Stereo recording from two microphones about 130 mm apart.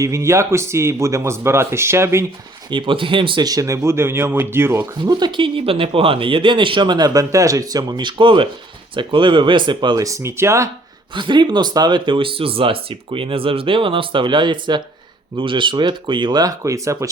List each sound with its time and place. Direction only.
0.0 s speech: 25° right (ahead or behind)
2.6 s speech: 40° right (ahead or behind); by 4.9 s 20° right (ahead or behind)
5.0 s speech: 35° right (ahead or behind)
11.1 s speech: 35° right (ahead or behind)